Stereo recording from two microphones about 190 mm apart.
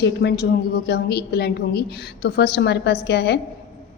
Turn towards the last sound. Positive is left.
turn(degrees=60)  # may be behind; listen again after turning